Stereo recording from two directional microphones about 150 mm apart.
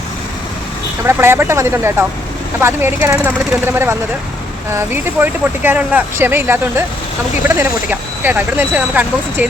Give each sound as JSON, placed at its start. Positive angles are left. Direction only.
{"t": 1.0, "sound": "speech", "side_deg": -15}